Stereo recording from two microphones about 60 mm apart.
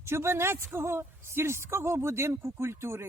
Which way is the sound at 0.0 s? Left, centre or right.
Right.